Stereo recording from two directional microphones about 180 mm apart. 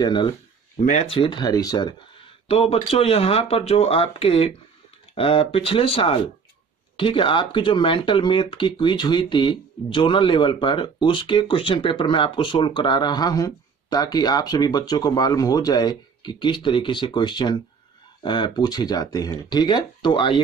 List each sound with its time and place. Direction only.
0.0 s speech: 25° left (ahead or behind)